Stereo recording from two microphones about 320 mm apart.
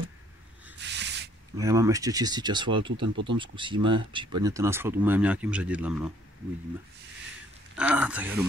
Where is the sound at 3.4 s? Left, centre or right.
Centre.